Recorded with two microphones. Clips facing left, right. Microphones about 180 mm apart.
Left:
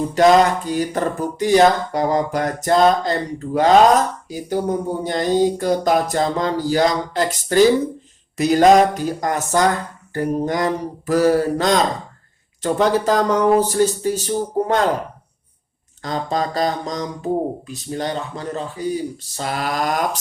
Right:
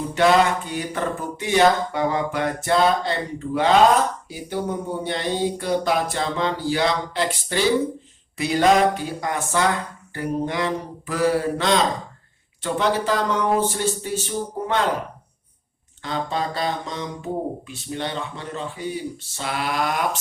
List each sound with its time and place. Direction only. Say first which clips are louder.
0.1 s speech: left 4 dB; 40° left (ahead or behind)
16.0 s speech: left 3 dB; 40° left (ahead or behind)